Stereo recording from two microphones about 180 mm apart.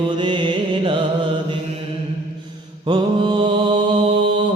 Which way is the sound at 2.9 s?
25° right (ahead or behind).